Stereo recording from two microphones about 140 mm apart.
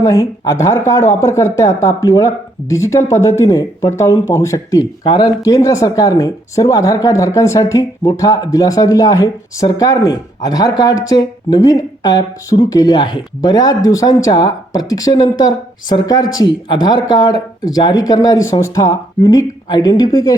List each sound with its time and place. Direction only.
0.0 s speech: 25° left (ahead or behind)